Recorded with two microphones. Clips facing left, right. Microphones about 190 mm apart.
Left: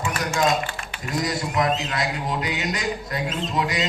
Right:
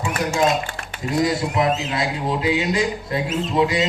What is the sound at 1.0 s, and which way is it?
A man's voice, 25° right (ahead or behind).